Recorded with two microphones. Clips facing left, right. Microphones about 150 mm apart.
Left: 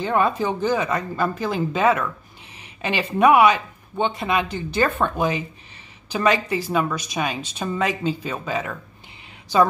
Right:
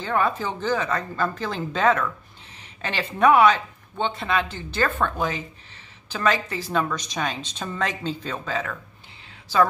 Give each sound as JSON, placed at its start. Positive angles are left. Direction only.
{"t": 0.0, "sound": "speech", "side_deg": 15}